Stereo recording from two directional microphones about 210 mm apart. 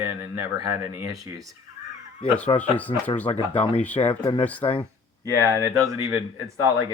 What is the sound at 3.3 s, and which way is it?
Speech, 30° left (ahead or behind).